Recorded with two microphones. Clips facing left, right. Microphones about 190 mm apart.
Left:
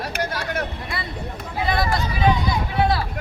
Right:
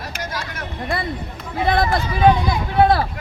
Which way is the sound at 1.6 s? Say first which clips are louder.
Right 4 dB; 55° right (ahead or behind).